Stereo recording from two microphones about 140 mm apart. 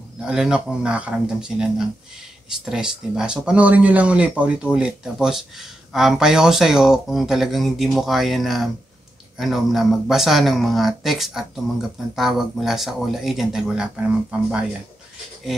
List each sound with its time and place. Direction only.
0.2 s speech: 5° right (ahead or behind)